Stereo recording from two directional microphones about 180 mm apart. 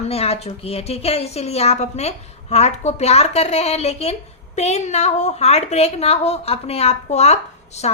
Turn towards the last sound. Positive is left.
turn(degrees=40)  # may be behind; listen again after turning